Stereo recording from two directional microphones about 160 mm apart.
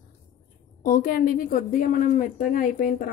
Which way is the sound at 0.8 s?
60° left (ahead or behind).